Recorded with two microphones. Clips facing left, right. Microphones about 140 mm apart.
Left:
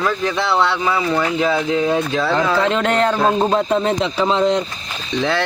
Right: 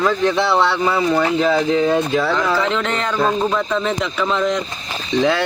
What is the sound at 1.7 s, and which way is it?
Speech, 15° left (ahead or behind).